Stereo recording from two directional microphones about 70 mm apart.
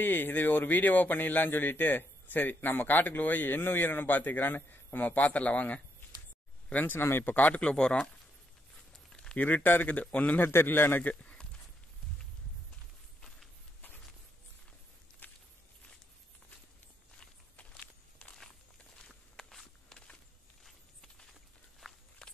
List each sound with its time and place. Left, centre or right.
0.0 s speech: left
8.9 s a sound: centre
9.4 s speech: left
13.7 s a sound: left
15.2 s walk: left
18.2 s walk: centre
20.6 s walk: centre
22.2 s walk: centre